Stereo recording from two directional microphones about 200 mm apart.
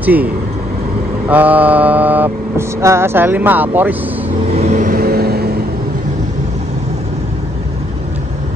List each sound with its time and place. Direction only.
0.0 s speech: 10° right (ahead or behind)
1.3 s vehicle: 10° right (ahead or behind)
4.5 s vehicle: 35° right (ahead or behind); by 5.5 s 50° right (ahead or behind)